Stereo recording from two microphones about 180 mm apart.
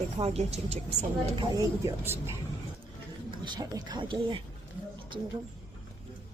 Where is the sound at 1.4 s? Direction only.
20° right (ahead or behind).